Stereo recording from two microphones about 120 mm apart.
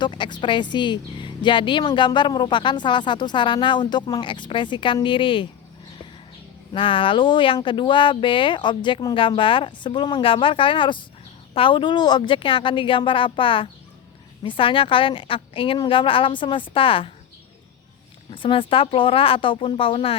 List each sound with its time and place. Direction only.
0.0 s a woman's voice: 40° left (ahead or behind)
6.7 s speech: 45° left (ahead or behind)
18.3 s speech: 45° left (ahead or behind)